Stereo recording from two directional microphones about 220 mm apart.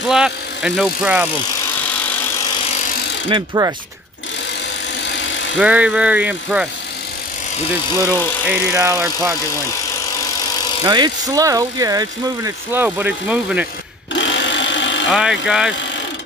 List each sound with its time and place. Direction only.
0.1 s speech: 5° right (ahead or behind)
3.3 s speech: 20° right (ahead or behind)
5.6 s speech: 5° right (ahead or behind)
8.1 s speech: 10° right (ahead or behind)
10.9 s speech: 15° right (ahead or behind)
14.1 s sewing machine: 55° left (ahead or behind)
15.0 s speech: 5° right (ahead or behind)